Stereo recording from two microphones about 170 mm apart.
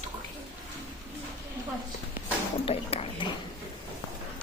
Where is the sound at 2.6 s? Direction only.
35° left (ahead or behind).